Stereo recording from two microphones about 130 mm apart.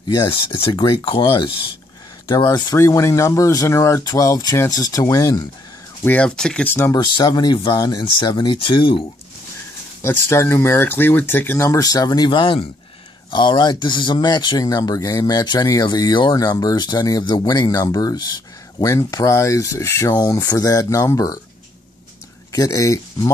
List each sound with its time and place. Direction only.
0.3 s speech: 40° left (ahead or behind)
2.5 s speech: 25° left (ahead or behind)
6.0 s speech: 10° left (ahead or behind)
6.9 s speech: 35° left (ahead or behind)
10.0 s speech: 20° left (ahead or behind)
22.5 s speech: 25° left (ahead or behind)